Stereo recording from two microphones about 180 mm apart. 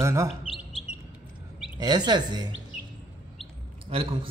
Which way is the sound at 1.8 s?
25° right (ahead or behind).